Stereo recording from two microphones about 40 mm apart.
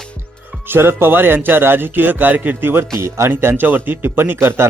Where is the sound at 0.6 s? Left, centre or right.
Right.